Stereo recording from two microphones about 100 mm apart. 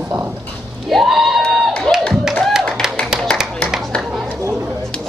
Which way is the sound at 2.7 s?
5° right (ahead or behind).